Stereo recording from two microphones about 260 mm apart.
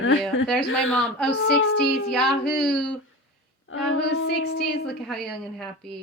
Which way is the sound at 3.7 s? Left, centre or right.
Left.